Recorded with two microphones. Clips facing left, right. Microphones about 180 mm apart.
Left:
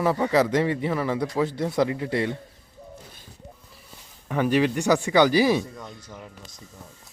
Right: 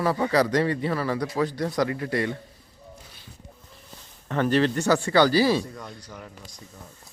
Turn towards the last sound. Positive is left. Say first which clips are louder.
# even
turn(degrees=0)  # may be behind; listen again after turning